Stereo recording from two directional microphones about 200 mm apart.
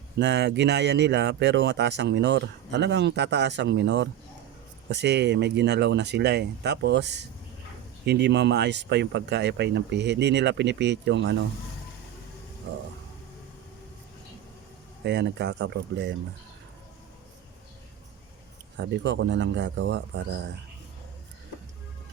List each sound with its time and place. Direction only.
0.2 s speech: 60° right (ahead or behind)
15.0 s speech: 60° right (ahead or behind)
18.9 s speech: 60° right (ahead or behind)